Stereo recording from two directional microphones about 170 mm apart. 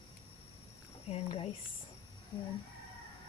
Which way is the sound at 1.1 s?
40° left (ahead or behind).